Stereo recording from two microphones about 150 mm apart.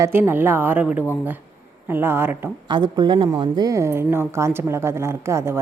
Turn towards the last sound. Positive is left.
turn(degrees=-15)  # may be behind; listen again after turning